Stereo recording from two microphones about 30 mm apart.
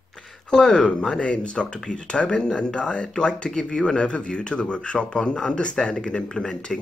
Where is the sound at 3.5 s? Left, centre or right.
Left.